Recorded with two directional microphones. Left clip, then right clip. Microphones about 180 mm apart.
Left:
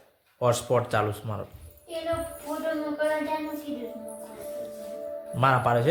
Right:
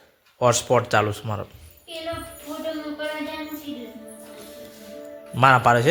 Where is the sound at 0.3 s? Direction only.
35° right (ahead or behind).